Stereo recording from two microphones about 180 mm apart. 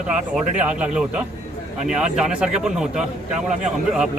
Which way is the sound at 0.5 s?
5° right (ahead or behind).